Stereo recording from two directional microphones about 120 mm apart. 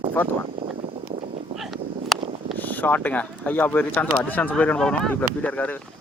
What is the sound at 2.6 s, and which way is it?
Speech, 15° left (ahead or behind).